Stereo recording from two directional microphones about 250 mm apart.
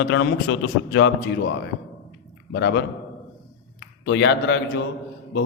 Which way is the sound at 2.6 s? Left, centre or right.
Left.